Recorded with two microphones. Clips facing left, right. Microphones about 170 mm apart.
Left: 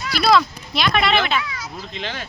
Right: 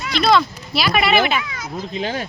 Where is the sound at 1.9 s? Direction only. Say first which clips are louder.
Right 7 dB; 40° right (ahead or behind).